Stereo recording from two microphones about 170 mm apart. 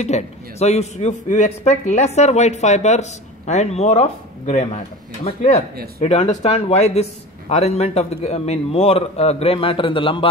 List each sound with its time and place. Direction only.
0.0 s a man's voice: 40° left (ahead or behind)